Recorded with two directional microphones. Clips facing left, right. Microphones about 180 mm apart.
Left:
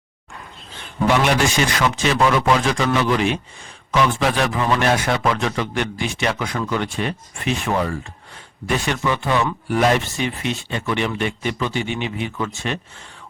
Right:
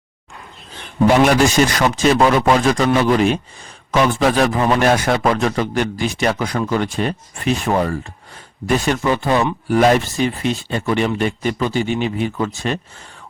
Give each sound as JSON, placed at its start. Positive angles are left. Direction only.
{"t": 1.2, "sound": "speech", "side_deg": -40}